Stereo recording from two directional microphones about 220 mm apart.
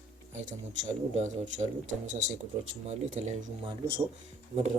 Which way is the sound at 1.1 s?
30° right (ahead or behind).